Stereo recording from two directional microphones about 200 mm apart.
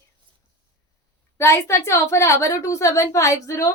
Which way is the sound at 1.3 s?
15° left (ahead or behind).